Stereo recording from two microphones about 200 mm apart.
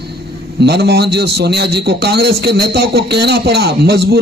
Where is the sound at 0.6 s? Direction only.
55° right (ahead or behind).